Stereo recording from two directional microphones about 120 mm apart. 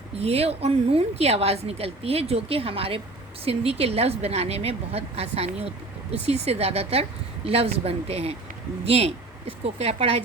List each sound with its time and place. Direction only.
0.2 s a woman's voice: 55° right (ahead or behind)